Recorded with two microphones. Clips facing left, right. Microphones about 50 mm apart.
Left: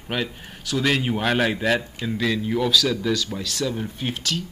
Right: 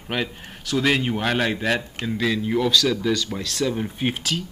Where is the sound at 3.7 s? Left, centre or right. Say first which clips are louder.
Right 3 dB; centre.